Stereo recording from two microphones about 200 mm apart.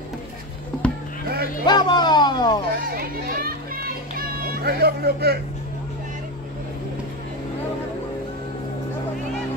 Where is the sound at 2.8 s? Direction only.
45° right (ahead or behind).